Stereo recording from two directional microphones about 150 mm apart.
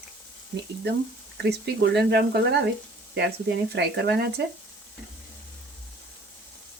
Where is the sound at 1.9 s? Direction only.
90° right.